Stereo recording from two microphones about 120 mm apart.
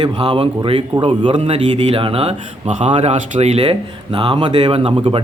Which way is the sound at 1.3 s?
60° right (ahead or behind).